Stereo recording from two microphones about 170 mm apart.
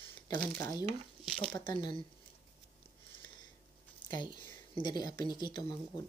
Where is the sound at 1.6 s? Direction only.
25° left (ahead or behind).